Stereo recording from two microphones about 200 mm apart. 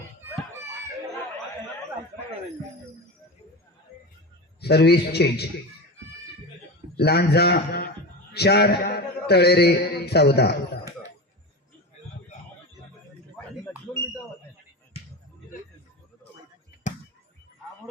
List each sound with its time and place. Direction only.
4.6 s a man's voice: 55° left (ahead or behind)
6.9 s a man's voice: 55° left (ahead or behind)